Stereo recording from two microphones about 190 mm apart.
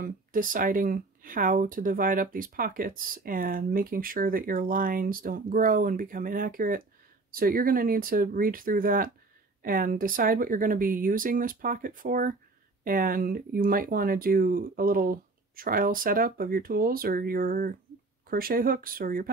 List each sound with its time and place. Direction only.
0.0 s speech: 45° right (ahead or behind)